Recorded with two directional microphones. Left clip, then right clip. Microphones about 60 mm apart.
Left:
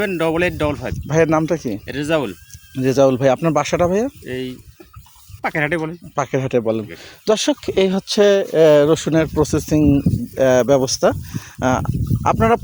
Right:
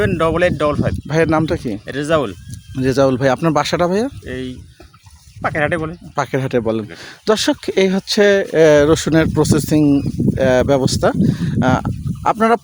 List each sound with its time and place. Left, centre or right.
0.0 s speech: right
1.0 s speech: centre
1.7 s speech: right
2.8 s speech: right
4.3 s speech: right
6.9 s speech: right
8.4 s speech: right
10.3 s speech: centre